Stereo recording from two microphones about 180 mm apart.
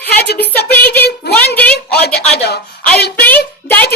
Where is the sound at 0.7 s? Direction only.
10° left (ahead or behind).